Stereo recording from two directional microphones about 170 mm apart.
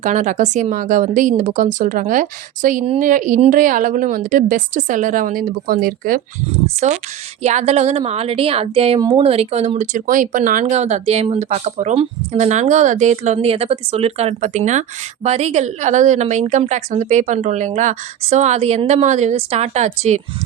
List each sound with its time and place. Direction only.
0.0 s a woman's voice: 45° right (ahead or behind)
6.7 s a woman's voice: 45° right (ahead or behind)
9.0 s speech: 25° right (ahead or behind)
9.2 s speech: 35° right (ahead or behind)